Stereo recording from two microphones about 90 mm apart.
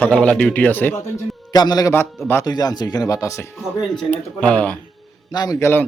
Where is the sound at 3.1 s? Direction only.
35° left (ahead or behind).